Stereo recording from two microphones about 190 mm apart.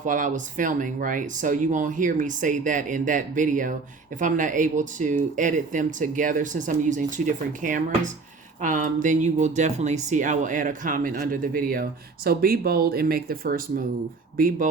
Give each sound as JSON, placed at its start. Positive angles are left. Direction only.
{"t": 0.0, "sound": "speech", "side_deg": -40}